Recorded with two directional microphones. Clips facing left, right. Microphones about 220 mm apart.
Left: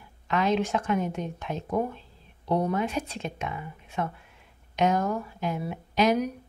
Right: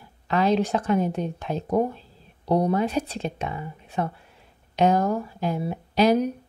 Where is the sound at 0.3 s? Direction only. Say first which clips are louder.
Right 3 dB; 35° right (ahead or behind).